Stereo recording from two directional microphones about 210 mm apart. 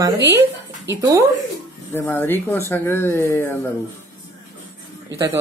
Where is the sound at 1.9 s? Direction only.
10° left (ahead or behind).